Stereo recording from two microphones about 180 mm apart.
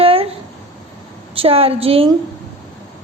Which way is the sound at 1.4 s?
30° right (ahead or behind).